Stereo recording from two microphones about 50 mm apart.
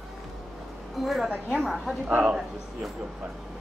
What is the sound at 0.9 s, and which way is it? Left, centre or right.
A woman's voice, centre.